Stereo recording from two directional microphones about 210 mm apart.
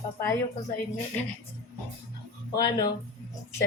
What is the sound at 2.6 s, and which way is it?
Speech, 20° left (ahead or behind).